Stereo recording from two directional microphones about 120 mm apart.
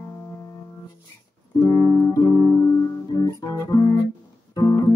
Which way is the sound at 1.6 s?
20° left (ahead or behind).